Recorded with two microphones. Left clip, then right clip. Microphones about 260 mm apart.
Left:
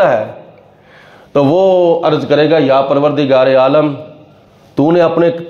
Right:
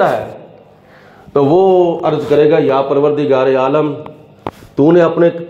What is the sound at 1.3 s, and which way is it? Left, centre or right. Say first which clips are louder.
A man's voice: even; left.